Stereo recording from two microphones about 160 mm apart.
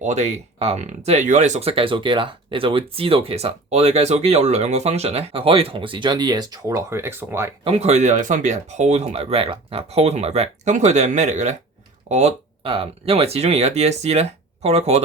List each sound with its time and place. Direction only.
0.0 s speech: 45° right (ahead or behind); by 7.5 s 15° right (ahead or behind)
7.6 s speech: 40° right (ahead or behind)